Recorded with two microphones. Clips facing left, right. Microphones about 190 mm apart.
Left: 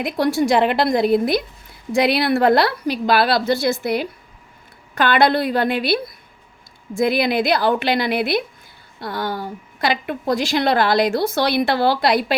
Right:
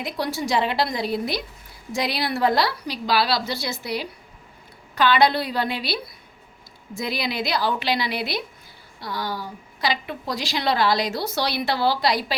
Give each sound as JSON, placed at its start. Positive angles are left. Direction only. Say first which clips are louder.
{"t": 0.0, "sound": "a woman's voice", "louder": "left 8 dB", "side_deg": 50}